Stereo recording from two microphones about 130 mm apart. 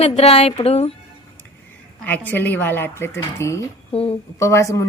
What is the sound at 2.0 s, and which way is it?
Speech, 15° left (ahead or behind).